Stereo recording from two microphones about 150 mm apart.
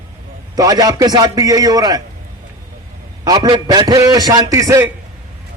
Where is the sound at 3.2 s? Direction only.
30° right (ahead or behind).